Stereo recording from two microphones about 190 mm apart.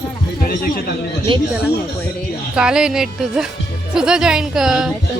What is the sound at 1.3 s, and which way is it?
Speech, 25° right (ahead or behind).